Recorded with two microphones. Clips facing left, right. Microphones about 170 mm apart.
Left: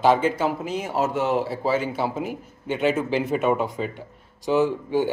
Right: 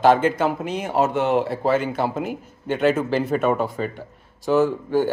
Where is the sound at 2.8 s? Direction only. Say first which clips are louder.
Right 2 dB; 45° right (ahead or behind).